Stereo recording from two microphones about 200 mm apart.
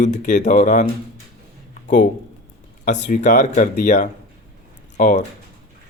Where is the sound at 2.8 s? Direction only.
40° left (ahead or behind).